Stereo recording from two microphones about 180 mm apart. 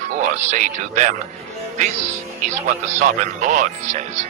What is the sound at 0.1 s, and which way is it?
A man's voice, 45° right (ahead or behind).